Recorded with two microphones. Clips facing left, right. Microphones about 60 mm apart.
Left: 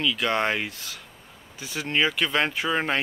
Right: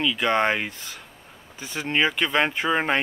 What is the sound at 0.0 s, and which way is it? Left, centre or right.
Speech, centre.